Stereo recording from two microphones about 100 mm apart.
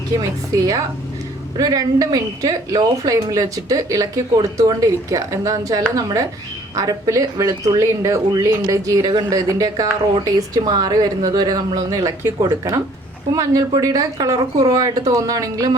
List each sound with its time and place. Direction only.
0.2 s speech: 35° right (ahead or behind)